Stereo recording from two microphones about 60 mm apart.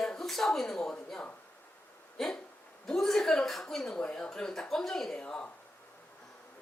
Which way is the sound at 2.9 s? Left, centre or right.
Centre.